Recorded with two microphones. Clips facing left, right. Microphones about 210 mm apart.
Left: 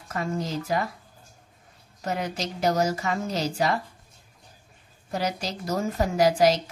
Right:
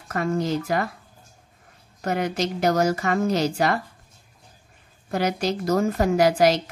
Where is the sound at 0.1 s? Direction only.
60° right (ahead or behind).